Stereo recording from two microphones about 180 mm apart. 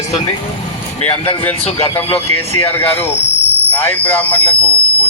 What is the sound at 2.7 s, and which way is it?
Speech, 10° left (ahead or behind).